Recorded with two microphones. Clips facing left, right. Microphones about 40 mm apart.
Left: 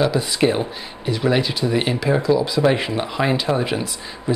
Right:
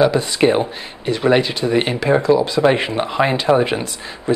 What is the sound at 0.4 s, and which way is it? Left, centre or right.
Speech, centre.